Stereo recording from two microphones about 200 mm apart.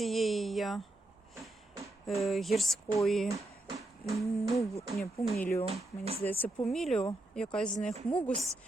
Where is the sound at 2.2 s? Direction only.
Centre (ahead or behind).